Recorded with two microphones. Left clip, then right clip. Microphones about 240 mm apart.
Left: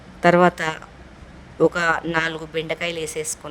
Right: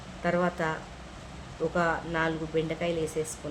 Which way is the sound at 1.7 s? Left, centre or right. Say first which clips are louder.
Left 7 dB; left.